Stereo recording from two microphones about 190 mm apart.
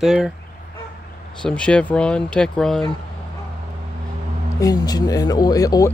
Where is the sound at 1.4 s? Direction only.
5° left (ahead or behind).